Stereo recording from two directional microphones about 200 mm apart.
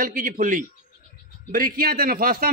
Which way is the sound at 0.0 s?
45° right (ahead or behind).